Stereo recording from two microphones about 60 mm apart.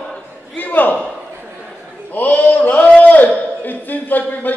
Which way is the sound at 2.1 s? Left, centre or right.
Left.